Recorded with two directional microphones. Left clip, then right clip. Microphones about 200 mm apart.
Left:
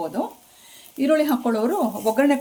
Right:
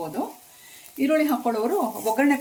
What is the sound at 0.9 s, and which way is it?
Speech, 55° left (ahead or behind).